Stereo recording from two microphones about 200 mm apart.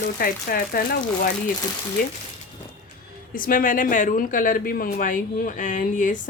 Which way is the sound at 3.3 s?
45° left (ahead or behind).